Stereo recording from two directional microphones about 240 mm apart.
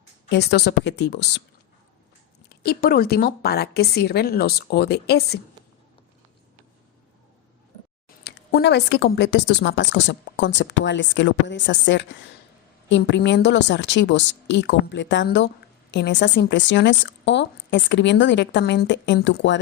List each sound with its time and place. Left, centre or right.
0.3 s speech: left
2.5 s a woman's voice: left
8.2 s speech: left